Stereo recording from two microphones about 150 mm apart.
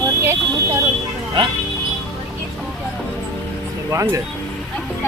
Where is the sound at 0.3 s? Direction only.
20° right (ahead or behind).